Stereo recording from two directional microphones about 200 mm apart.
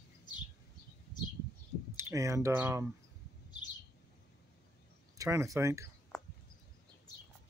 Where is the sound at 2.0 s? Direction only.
15° right (ahead or behind).